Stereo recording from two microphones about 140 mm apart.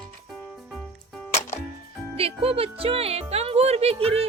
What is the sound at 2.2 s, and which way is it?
Speech, 45° right (ahead or behind).